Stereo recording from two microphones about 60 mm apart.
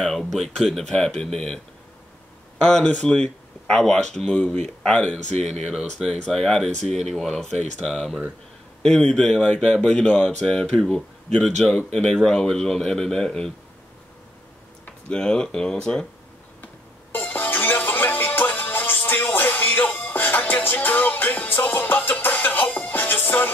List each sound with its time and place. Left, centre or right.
0.0 s speech: centre
2.6 s speech: centre
5.5 s speech: centre
8.8 s speech: centre
14.9 s speech: centre
16.6 s music: left